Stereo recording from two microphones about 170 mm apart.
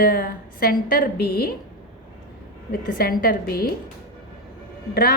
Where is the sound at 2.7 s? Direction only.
60° left (ahead or behind).